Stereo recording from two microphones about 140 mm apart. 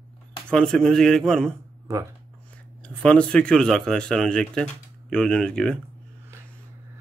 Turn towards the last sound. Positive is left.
turn(degrees=5)  # may be behind; listen again after turning